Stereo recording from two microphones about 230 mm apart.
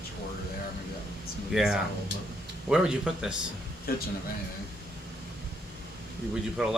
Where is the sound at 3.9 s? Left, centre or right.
Left.